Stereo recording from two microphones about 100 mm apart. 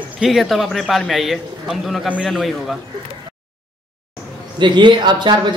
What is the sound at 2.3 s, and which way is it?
Speech, centre (ahead or behind).